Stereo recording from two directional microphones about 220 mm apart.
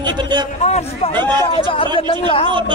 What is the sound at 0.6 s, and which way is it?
A man's voice, 30° left (ahead or behind).